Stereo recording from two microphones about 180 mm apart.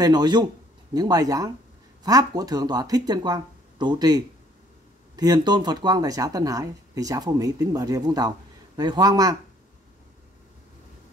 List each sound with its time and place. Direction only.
0.0 s speech: 25° right (ahead or behind)